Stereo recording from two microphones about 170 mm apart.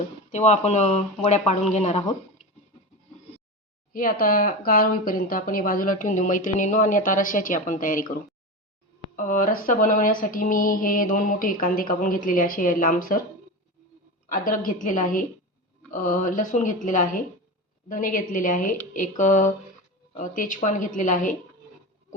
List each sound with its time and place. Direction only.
0.3 s speech: 45° left (ahead or behind)
2.4 s a sound: centre (ahead or behind)
3.9 s speech: 55° left (ahead or behind)
14.3 s speech: 55° left (ahead or behind)